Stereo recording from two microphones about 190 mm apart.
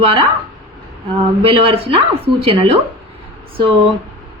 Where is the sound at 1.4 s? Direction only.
30° right (ahead or behind).